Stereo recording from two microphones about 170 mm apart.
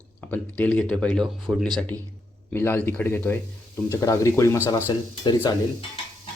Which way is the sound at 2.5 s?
15° left (ahead or behind).